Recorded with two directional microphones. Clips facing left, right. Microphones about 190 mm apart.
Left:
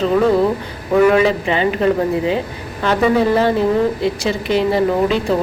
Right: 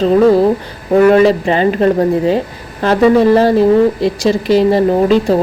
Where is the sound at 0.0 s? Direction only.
35° right (ahead or behind).